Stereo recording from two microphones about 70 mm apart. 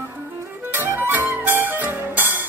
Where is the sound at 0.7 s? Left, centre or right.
Right.